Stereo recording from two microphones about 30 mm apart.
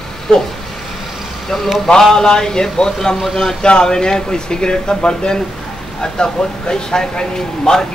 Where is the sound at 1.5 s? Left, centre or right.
Centre.